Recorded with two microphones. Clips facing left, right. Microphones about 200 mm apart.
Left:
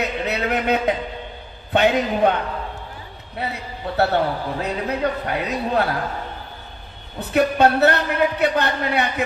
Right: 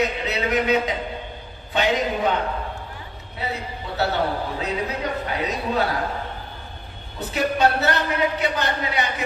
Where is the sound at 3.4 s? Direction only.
60° left (ahead or behind).